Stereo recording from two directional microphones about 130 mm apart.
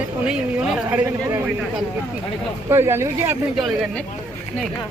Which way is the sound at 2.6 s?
20° right (ahead or behind).